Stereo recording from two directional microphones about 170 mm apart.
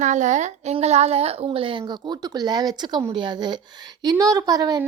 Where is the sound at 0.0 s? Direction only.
45° right (ahead or behind).